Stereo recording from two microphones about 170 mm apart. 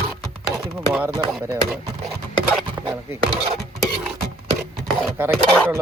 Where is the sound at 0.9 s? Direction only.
10° right (ahead or behind).